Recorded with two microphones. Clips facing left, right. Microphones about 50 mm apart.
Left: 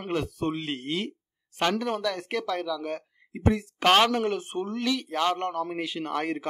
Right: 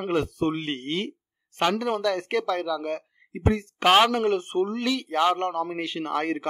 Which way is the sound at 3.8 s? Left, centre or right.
Centre.